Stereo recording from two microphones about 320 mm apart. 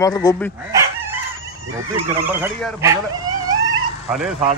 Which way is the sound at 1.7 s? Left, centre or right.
Centre.